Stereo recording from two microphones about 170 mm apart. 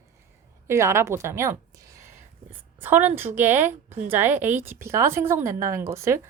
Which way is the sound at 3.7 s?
45° right (ahead or behind).